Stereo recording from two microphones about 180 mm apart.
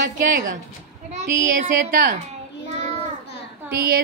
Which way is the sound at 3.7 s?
60° right (ahead or behind).